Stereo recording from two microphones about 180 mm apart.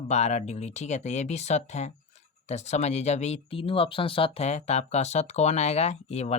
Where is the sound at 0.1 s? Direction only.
40° left (ahead or behind).